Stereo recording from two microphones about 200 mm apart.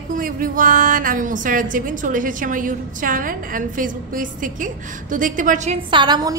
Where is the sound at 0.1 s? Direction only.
45° right (ahead or behind).